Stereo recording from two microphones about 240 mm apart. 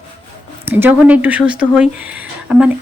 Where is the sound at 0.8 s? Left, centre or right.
Centre.